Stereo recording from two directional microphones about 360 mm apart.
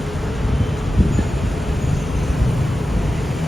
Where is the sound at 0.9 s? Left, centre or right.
Centre.